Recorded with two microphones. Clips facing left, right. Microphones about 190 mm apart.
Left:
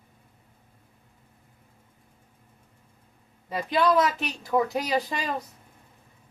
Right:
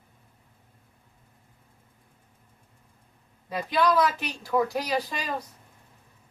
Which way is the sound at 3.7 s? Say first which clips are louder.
Left 1 dB; 20° left (ahead or behind).